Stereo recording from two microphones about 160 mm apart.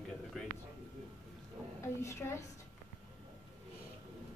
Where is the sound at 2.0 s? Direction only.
15° left (ahead or behind).